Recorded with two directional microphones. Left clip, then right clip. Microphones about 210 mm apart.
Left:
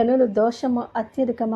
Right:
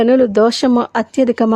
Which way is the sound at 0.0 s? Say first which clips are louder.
Right 7 dB; 35° right (ahead or behind).